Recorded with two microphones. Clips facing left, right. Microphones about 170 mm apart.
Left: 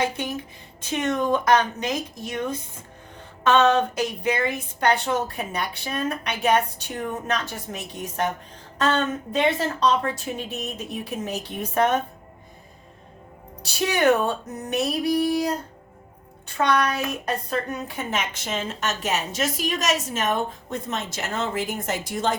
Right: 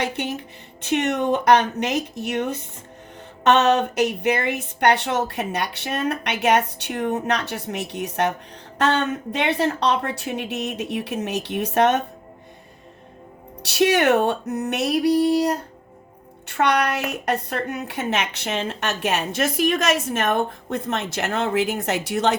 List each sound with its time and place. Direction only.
0.8 s a woman's voice: 70° right (ahead or behind)
13.6 s a woman's voice: 70° right (ahead or behind)